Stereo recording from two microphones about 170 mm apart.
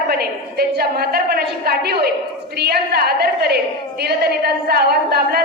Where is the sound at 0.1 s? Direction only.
65° right (ahead or behind).